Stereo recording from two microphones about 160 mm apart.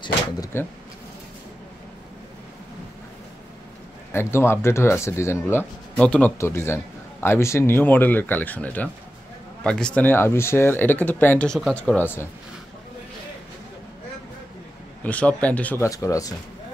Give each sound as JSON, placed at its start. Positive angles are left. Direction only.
{"t": 0.5, "sound": "speech", "side_deg": 15}
{"t": 4.1, "sound": "speech", "side_deg": 15}
{"t": 15.0, "sound": "speech", "side_deg": 10}